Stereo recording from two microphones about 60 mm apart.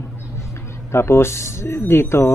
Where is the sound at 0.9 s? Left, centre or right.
Left.